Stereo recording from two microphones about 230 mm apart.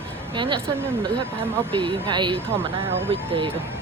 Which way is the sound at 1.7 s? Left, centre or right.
Right.